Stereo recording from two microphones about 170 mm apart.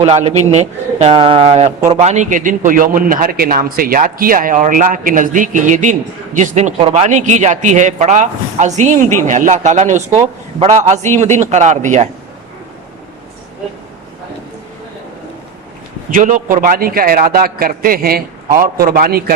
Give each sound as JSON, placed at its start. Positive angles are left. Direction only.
{"t": 0.0, "sound": "a man's voice", "side_deg": -40}
{"t": 16.1, "sound": "a man's voice", "side_deg": -50}